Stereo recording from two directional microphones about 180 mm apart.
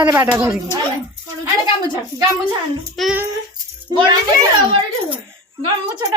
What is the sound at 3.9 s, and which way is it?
Speech, 25° right (ahead or behind).